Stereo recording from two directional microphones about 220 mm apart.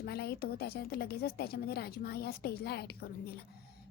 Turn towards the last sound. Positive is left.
turn(degrees=45)  # may be behind; listen again after turning